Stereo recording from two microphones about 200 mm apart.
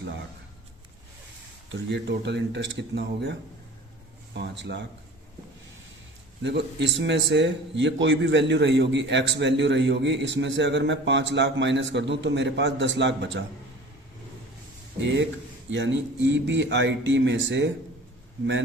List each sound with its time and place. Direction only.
1.7 s a man's voice: 60° right (ahead or behind)
4.4 s a man's voice: 60° right (ahead or behind)
6.4 s a man's voice: 60° right (ahead or behind)
15.0 s a man's voice: 65° right (ahead or behind)